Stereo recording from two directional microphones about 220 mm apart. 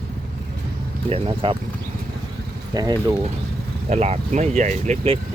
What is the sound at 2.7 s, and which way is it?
Speech, 15° right (ahead or behind).